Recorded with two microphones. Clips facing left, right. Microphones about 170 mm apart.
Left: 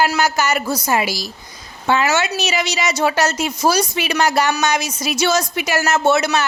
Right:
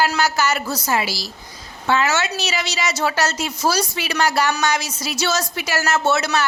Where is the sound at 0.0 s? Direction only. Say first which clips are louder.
Left 2 dB; 15° left (ahead or behind).